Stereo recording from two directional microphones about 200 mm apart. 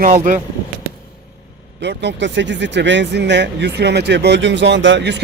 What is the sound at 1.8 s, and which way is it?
Speech, 60° right (ahead or behind).